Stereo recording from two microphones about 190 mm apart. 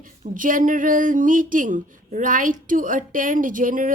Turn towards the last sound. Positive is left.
turn(degrees=-45)  # may be behind; listen again after turning